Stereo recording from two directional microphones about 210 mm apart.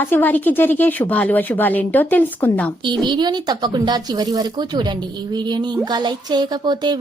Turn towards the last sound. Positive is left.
turn(degrees=-20)  # may be behind; listen again after turning